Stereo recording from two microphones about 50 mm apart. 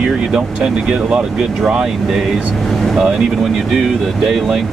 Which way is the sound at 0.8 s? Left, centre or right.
Centre.